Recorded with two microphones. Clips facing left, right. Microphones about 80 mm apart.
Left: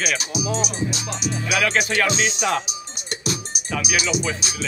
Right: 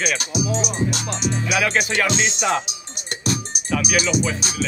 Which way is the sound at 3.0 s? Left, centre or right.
Right.